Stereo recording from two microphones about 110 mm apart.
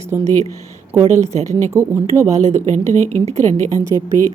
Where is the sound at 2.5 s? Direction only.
90° right.